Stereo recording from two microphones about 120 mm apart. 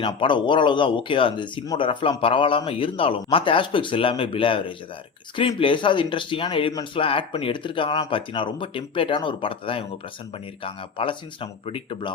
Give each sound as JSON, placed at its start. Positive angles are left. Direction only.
{"t": 0.0, "sound": "speech", "side_deg": 45}